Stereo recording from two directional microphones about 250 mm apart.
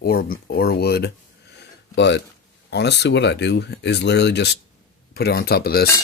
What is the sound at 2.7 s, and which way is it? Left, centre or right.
Speech, left.